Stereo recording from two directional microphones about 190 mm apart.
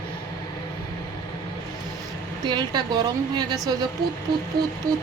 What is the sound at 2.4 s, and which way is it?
A woman's voice, 25° right (ahead or behind).